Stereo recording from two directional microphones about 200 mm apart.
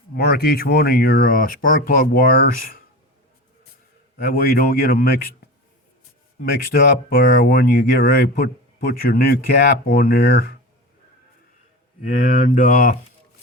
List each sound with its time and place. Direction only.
0.2 s speech: 50° left (ahead or behind)
4.2 s speech: 50° left (ahead or behind)
6.4 s speech: 50° left (ahead or behind)
12.0 s speech: 45° left (ahead or behind)